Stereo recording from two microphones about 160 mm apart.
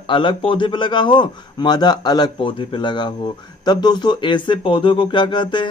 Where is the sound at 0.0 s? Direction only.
30° left (ahead or behind).